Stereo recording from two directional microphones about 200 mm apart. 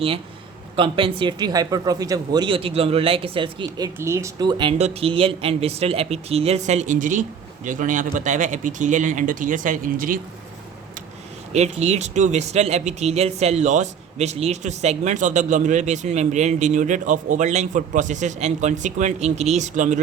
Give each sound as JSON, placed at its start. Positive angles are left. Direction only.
{"t": 0.8, "sound": "a man's voice", "side_deg": -25}
{"t": 3.9, "sound": "speech", "side_deg": -15}
{"t": 11.5, "sound": "speech", "side_deg": -30}